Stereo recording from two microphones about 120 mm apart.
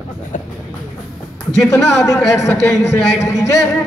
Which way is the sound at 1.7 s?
25° left (ahead or behind).